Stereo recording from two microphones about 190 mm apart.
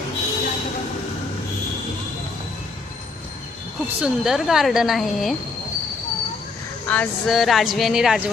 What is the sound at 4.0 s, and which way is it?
A woman's voice, centre (ahead or behind).